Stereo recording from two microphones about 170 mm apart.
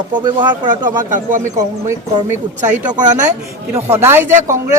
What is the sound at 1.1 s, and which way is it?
Speech, 50° right (ahead or behind).